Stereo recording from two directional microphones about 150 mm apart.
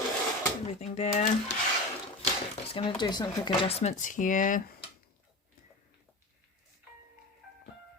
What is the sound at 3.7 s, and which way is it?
Speech, 45° left (ahead or behind).